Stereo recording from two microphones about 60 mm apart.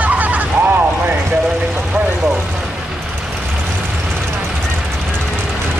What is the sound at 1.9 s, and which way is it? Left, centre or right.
Vehicle, right.